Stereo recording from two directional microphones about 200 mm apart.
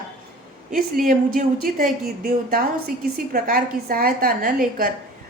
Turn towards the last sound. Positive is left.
turn(degrees=-45)  # may be behind; listen again after turning